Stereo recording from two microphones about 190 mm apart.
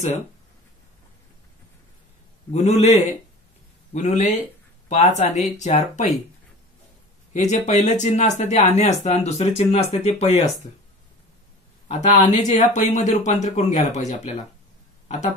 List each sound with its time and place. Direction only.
2.5 s speech: 35° left (ahead or behind)
7.3 s speech: 40° left (ahead or behind)
11.9 s speech: 35° left (ahead or behind)